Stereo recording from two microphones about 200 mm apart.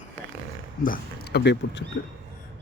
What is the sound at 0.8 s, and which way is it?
Speech, 50° left (ahead or behind).